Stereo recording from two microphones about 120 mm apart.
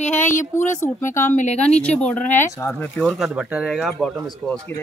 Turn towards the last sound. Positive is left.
turn(degrees=0)  # may be behind; listen again after turning